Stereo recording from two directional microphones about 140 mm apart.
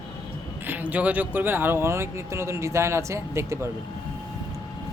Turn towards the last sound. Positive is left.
turn(degrees=-20)  # may be behind; listen again after turning